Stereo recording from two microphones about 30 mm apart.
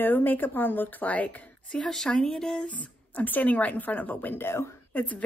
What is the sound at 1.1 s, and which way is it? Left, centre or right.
Speech, left.